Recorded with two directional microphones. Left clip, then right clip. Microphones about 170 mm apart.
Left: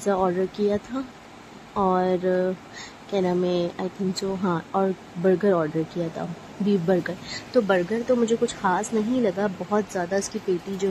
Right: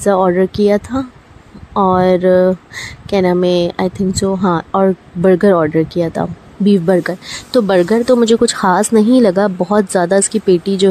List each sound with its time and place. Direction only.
0.0 s speech: 30° right (ahead or behind)